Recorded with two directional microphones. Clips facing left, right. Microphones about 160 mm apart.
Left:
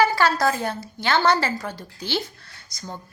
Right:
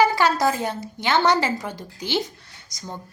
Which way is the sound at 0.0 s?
20° right (ahead or behind).